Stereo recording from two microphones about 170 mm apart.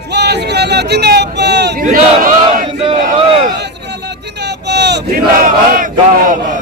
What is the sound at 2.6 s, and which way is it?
Speech, 30° right (ahead or behind).